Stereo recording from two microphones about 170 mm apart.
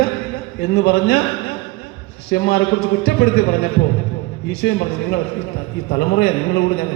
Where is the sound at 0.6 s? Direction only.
75° left (ahead or behind).